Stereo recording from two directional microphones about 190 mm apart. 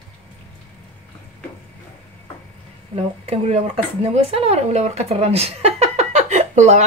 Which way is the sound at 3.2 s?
35° right (ahead or behind).